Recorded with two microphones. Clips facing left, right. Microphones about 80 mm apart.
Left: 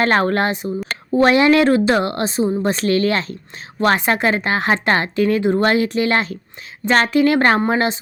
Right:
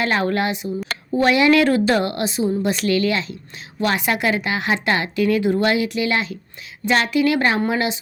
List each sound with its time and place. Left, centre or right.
0.0 s a woman's voice: left